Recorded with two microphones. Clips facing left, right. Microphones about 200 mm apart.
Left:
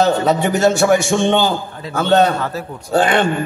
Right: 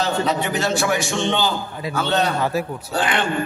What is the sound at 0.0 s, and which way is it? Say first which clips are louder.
A man's voice: left 6 dB; 50° left (ahead or behind).